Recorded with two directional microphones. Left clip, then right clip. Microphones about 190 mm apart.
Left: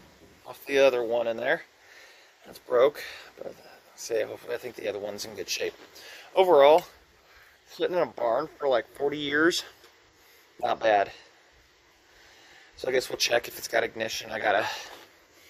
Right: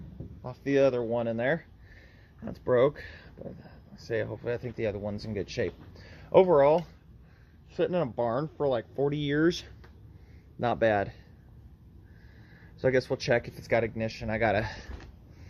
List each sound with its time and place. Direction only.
0.6 s speech: 15° left (ahead or behind)
7.9 s speech: 15° left (ahead or behind)
10.6 s speech: 10° left (ahead or behind)
12.8 s speech: 10° left (ahead or behind)